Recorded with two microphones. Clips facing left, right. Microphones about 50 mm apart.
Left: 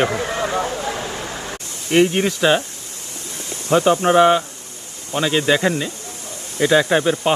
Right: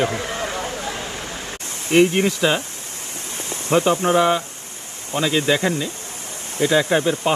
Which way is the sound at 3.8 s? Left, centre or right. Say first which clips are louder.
Left 4 dB; left.